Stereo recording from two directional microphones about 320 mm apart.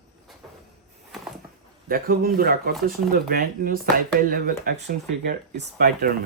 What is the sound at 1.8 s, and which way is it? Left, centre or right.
Speech, right.